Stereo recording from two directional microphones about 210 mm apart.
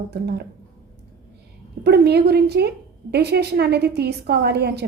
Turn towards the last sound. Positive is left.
turn(degrees=-50)  # may be behind; listen again after turning